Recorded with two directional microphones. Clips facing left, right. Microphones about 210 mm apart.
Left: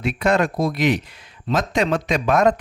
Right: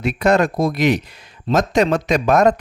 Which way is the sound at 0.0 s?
40° right (ahead or behind).